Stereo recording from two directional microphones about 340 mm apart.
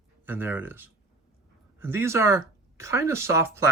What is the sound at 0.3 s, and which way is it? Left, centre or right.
Speech, centre.